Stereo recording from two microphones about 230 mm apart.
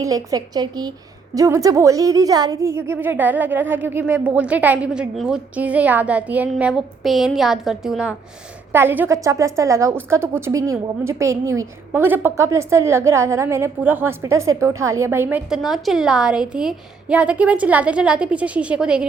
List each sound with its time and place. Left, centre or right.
0.0 s a woman's voice: centre